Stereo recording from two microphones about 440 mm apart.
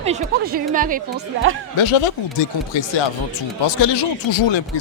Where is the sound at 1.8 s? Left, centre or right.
Left.